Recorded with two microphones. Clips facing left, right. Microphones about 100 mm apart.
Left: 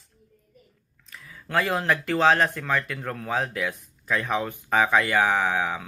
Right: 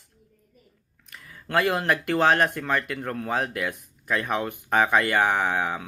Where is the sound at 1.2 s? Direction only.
Centre (ahead or behind).